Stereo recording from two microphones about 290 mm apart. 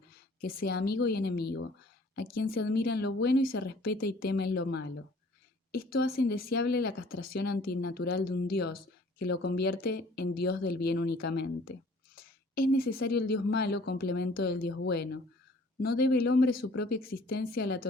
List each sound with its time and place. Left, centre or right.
0.4 s speech: left
6.0 s speech: left